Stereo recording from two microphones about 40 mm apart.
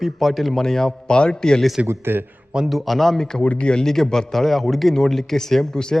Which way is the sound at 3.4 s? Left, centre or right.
Left.